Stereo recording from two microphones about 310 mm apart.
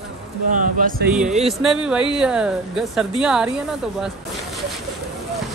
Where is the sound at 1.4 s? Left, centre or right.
Centre.